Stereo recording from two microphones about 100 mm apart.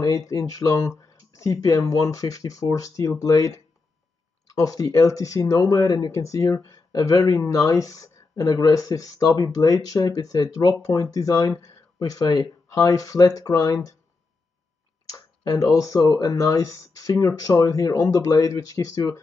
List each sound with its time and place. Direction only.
0.0 s speech: 35° left (ahead or behind)
4.6 s speech: 35° left (ahead or behind)
15.0 s speech: 35° left (ahead or behind)